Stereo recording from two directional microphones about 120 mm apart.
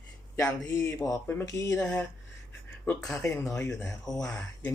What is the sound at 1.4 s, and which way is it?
Speech, 30° left (ahead or behind).